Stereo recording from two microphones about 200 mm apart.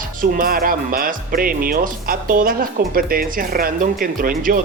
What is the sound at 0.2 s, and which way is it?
Speech, 45° right (ahead or behind).